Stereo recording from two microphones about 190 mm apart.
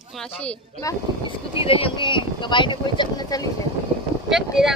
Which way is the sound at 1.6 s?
30° left (ahead or behind).